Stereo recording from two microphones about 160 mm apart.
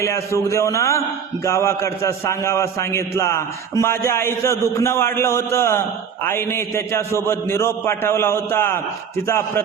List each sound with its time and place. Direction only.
0.0 s a man's voice: 20° left (ahead or behind)